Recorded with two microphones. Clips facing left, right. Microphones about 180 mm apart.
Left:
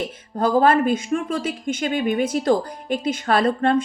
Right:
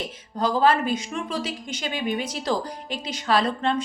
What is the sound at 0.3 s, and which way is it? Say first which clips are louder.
A woman's voice: left 4 dB; 50° left (ahead or behind).